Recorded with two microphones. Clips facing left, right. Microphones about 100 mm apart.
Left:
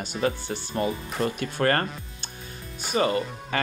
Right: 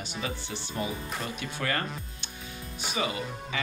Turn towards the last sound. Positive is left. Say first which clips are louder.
# left 8 dB
turn(degrees=50)  # may be behind; listen again after turning